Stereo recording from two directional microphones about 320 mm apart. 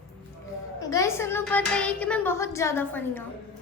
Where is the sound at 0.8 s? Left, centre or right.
Centre.